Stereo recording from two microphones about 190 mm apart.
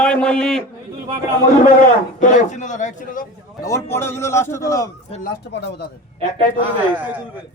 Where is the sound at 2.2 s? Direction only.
40° left (ahead or behind).